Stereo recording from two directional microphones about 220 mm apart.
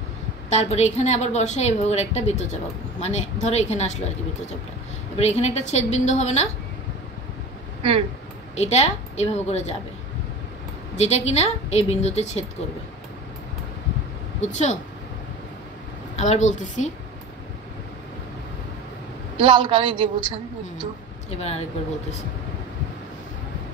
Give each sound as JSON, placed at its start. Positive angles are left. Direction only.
{"t": 0.5, "sound": "a woman's voice", "side_deg": 30}
{"t": 5.1, "sound": "a woman's voice", "side_deg": 30}
{"t": 8.5, "sound": "a woman's voice", "side_deg": 30}
{"t": 11.0, "sound": "a woman's voice", "side_deg": 30}
{"t": 14.4, "sound": "a woman's voice", "side_deg": 35}
{"t": 16.2, "sound": "a woman's voice", "side_deg": 30}
{"t": 19.3, "sound": "a woman's voice", "side_deg": -20}
{"t": 21.3, "sound": "a woman's voice", "side_deg": 30}